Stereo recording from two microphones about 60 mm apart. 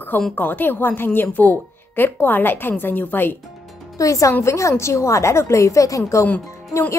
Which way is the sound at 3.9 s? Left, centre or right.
Left.